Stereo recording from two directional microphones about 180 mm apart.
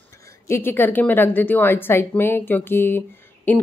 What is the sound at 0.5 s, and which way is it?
Speech, 10° left (ahead or behind).